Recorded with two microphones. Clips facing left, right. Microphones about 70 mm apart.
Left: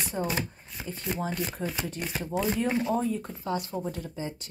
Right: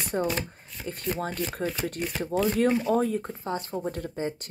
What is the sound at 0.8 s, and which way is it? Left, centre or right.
Speech, right.